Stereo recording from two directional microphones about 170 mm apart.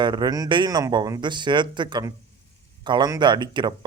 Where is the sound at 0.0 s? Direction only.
25° right (ahead or behind).